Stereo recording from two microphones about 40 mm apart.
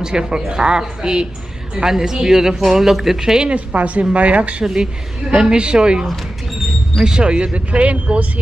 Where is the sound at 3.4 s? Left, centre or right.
Right.